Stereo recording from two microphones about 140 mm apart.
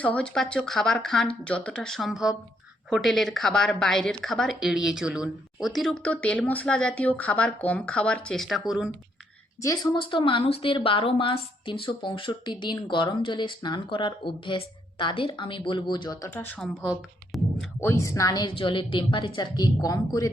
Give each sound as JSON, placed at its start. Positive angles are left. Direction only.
{"t": 0.0, "sound": "a woman's voice", "side_deg": 10}
{"t": 9.6, "sound": "speech", "side_deg": 25}
{"t": 16.8, "sound": "a woman's voice", "side_deg": -5}
{"t": 17.7, "sound": "a woman's voice", "side_deg": 20}